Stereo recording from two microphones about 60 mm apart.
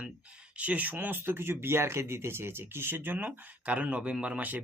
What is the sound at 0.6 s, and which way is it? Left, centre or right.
Speech, right.